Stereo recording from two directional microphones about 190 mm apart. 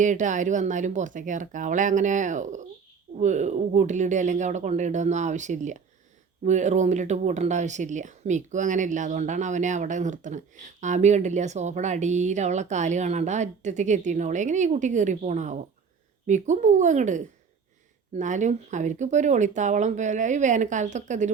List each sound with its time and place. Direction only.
0.0 s speech: 40° right (ahead or behind)